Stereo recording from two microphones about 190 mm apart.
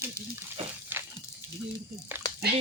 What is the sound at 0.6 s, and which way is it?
Speech, 30° right (ahead or behind).